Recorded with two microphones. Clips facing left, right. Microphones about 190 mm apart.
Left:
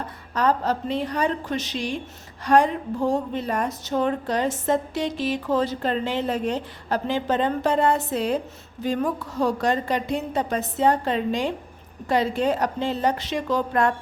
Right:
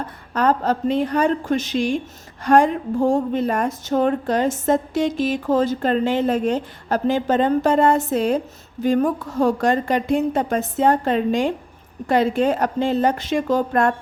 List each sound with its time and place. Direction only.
0.3 s a woman's voice: 55° right (ahead or behind)